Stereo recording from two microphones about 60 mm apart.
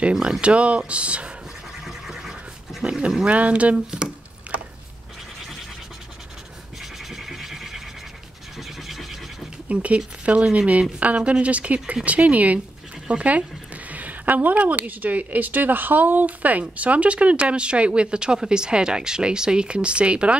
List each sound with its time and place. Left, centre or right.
0.0 s a woman's voice: centre
1.9 s pant: centre
3.3 s a woman's voice: right
3.9 s a sound: centre
6.8 s scratch: centre
8.5 s mechanisms: centre
9.7 s a woman's voice: right